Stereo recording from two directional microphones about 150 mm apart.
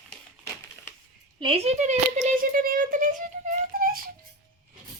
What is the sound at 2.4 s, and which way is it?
Speech, 65° right (ahead or behind).